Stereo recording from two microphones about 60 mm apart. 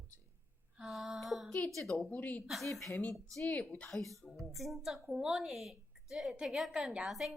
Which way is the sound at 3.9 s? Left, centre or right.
Centre.